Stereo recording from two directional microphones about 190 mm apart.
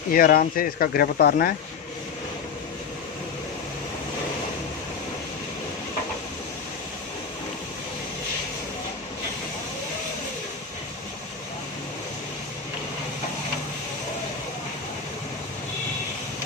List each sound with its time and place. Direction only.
0.1 s speech: 45° left (ahead or behind)